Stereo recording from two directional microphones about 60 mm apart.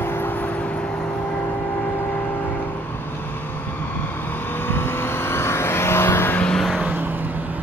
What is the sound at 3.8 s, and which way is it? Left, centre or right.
Vehicle, left.